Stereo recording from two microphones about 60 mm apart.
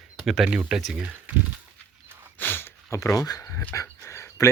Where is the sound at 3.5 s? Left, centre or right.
Left.